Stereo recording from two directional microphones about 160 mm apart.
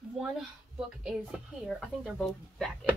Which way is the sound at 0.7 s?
5° right (ahead or behind).